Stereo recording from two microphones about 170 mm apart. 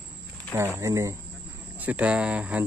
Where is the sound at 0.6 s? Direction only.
15° right (ahead or behind).